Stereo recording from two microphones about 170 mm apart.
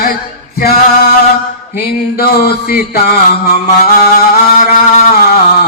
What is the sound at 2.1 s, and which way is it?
Mantra, 65° left (ahead or behind).